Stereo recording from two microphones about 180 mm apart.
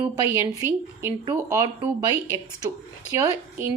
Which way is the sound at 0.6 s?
15° right (ahead or behind).